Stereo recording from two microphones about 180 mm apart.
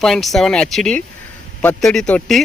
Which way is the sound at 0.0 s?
Centre (ahead or behind).